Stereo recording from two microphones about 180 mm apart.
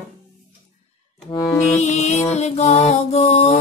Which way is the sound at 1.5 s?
40° left (ahead or behind).